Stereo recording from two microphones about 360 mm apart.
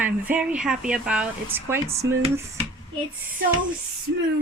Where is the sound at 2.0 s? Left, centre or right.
Right.